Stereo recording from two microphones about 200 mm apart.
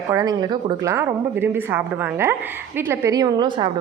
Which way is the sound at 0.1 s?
15° right (ahead or behind).